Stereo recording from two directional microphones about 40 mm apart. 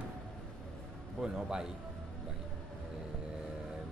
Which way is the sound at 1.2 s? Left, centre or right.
Centre.